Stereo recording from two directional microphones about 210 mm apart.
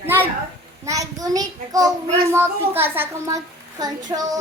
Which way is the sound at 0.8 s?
15° right (ahead or behind).